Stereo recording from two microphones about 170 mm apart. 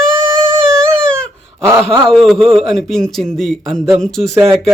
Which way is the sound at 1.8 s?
35° right (ahead or behind).